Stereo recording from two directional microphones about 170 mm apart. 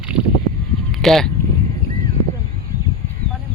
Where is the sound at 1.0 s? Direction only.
Centre (ahead or behind).